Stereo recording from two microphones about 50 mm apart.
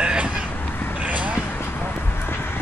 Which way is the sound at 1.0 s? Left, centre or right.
Right.